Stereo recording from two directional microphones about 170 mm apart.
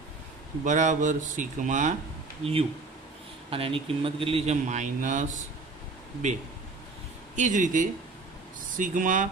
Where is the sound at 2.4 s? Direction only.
35° right (ahead or behind).